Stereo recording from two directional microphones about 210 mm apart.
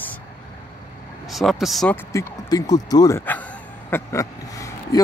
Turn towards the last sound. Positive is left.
turn(degrees=15)  # may be behind; listen again after turning